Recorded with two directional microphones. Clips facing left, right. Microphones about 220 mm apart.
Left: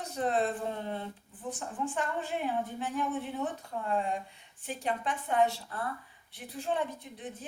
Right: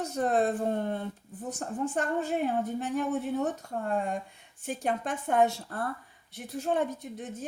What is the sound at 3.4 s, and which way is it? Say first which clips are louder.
Speech: right 4 dB; 45° right (ahead or behind).